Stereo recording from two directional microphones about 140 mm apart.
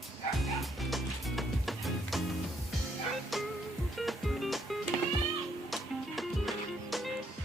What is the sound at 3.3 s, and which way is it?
Music, centre (ahead or behind).